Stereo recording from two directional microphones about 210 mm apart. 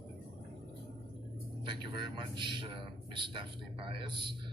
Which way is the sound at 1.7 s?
25° right (ahead or behind).